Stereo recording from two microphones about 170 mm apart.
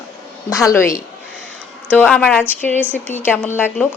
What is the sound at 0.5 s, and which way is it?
Speech, 20° left (ahead or behind).